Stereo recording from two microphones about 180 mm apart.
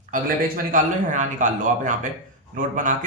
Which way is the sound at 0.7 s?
45° right (ahead or behind).